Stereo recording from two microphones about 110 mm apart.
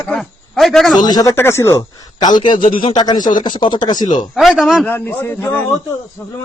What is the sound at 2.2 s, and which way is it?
Speech, 40° left (ahead or behind).